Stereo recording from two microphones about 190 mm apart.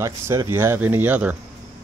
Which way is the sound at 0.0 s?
15° right (ahead or behind).